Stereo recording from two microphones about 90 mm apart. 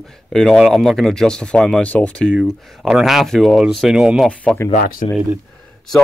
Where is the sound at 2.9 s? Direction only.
5° right (ahead or behind).